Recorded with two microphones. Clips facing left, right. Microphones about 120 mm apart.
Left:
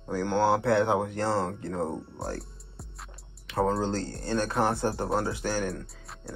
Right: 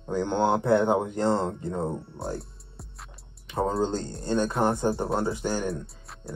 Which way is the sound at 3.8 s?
20° right (ahead or behind).